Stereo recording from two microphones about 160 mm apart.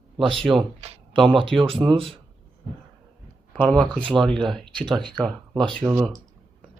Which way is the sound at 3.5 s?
5° left (ahead or behind).